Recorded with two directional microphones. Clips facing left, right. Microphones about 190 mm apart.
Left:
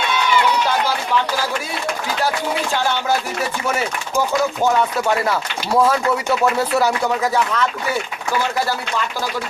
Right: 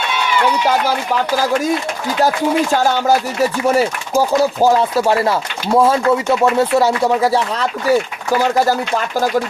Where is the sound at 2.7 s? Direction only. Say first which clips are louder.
Right 6 dB; 40° right (ahead or behind).